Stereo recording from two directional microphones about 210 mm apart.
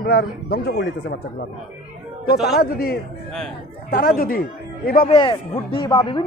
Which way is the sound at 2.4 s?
45° left (ahead or behind).